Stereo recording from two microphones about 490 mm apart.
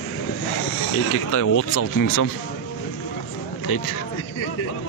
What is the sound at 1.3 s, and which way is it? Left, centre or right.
Speech, left.